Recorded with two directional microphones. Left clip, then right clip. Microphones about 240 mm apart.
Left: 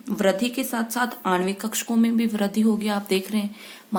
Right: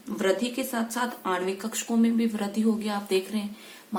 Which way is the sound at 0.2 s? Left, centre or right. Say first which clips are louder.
Left 4 dB; left.